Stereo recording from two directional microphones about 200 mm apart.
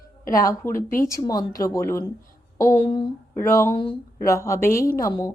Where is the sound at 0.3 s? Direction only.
15° left (ahead or behind).